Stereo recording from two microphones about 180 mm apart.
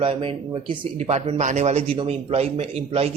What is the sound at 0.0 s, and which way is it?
Speech, 30° right (ahead or behind).